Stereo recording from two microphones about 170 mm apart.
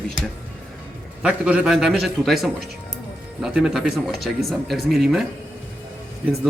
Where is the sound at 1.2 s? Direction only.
5° right (ahead or behind).